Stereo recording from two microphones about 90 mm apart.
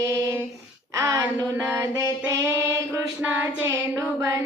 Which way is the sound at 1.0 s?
40° right (ahead or behind).